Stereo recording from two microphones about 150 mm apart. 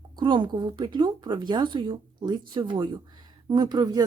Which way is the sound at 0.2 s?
30° right (ahead or behind).